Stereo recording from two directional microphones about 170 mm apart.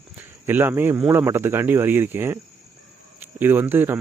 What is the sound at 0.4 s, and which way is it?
Speech, 10° right (ahead or behind).